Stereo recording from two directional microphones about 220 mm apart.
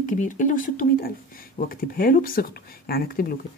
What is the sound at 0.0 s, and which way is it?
Speech, 35° left (ahead or behind).